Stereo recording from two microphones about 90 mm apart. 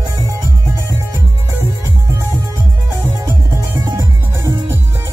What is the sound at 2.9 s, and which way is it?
Music, 25° right (ahead or behind).